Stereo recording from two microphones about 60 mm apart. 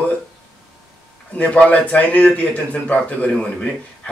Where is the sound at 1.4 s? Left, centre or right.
Left.